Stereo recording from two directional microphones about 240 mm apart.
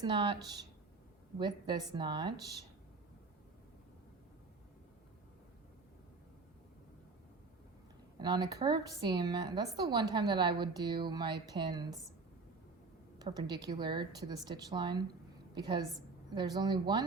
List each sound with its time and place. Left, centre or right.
0.0 s a woman's voice: centre
1.4 s a woman's voice: centre
8.2 s a woman's voice: centre
13.1 s a woman's voice: centre